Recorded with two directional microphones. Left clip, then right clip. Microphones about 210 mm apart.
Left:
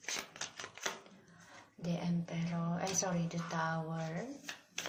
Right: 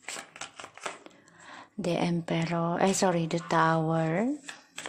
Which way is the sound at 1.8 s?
55° right (ahead or behind).